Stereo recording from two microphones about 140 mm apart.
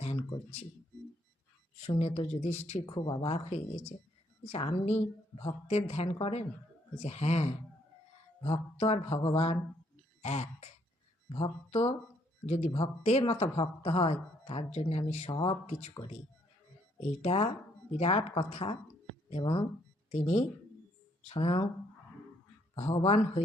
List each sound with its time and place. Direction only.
1.8 s speech: 50° left (ahead or behind)
2.8 s speech: 35° left (ahead or behind)
5.4 s speech: 35° left (ahead or behind)
5.7 s speech: 50° left (ahead or behind)
10.2 s throat clearing: 50° left (ahead or behind)
11.3 s speech: 35° left (ahead or behind)
15.3 s speech: 35° left (ahead or behind)
17.0 s speech: 50° left (ahead or behind)
20.1 s speech: 50° left (ahead or behind)
22.7 s speech: 40° left (ahead or behind)